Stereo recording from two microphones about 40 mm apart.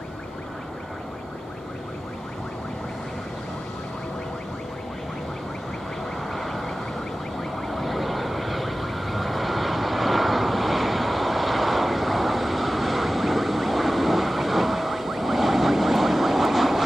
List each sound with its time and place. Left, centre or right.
6.3 s vehicle: centre
7.6 s vehicle: centre